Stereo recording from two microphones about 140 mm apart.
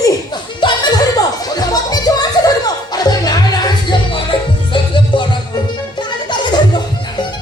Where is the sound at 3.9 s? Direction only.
35° left (ahead or behind).